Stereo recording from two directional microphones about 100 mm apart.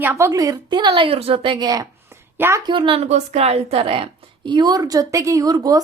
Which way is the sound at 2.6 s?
55° right (ahead or behind).